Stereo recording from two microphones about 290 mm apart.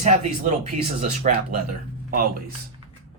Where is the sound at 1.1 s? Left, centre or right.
Right.